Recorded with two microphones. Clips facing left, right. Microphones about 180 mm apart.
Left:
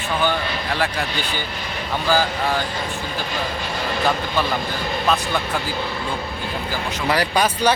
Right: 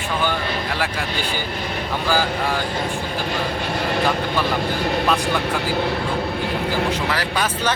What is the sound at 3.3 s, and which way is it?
Speech, 60° right (ahead or behind).